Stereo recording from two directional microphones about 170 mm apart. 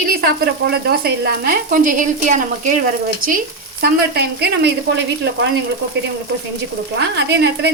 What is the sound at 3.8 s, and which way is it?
Speech, 70° right (ahead or behind).